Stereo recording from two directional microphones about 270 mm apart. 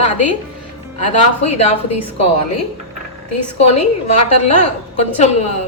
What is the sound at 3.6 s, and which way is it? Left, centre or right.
Speech, left.